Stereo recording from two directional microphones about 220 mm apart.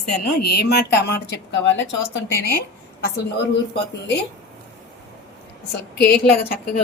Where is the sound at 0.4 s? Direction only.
45° left (ahead or behind).